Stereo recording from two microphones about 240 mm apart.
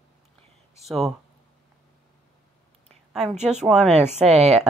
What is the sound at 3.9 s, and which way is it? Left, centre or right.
Speech, right.